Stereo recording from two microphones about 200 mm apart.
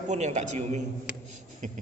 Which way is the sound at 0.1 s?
35° right (ahead or behind).